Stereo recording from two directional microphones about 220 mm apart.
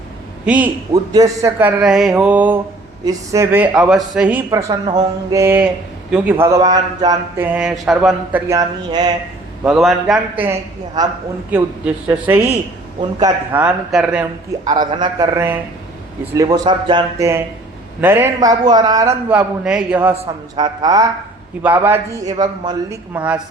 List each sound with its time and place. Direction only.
0.4 s speech: 5° right (ahead or behind)
8.4 s speech: 15° right (ahead or behind)
9.6 s a man's voice: centre (ahead or behind)
11.5 s speech: 10° right (ahead or behind)
13.0 s a man's voice: 20° right (ahead or behind)
13.5 s a man's voice: 5° right (ahead or behind)
14.6 s speech: 20° right (ahead or behind)
20.1 s a man's voice: 20° right (ahead or behind)